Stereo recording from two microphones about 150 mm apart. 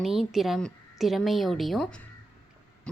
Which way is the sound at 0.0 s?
Centre (ahead or behind).